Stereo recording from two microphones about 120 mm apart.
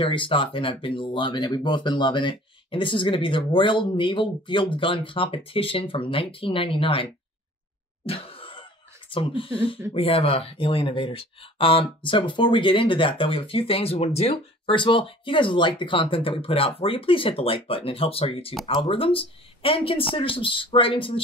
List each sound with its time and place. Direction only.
0.0 s speech: 45° left (ahead or behind)
8.0 s cough: 50° left (ahead or behind)
9.1 s speech: 45° left (ahead or behind)